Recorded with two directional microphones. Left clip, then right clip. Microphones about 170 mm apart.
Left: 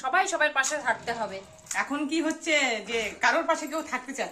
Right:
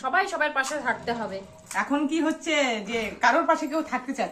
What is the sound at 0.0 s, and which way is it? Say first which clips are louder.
A woman's voice: even; 30° left (ahead or behind).